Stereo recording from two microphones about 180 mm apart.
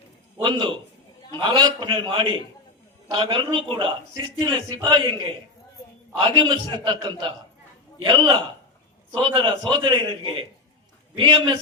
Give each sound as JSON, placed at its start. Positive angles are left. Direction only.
{"t": 0.4, "sound": "a man's voice", "side_deg": -25}